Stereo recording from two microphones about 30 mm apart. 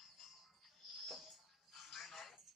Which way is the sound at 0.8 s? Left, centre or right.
Centre.